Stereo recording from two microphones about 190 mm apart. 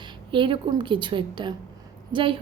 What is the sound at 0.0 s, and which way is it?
A woman's voice, 25° right (ahead or behind).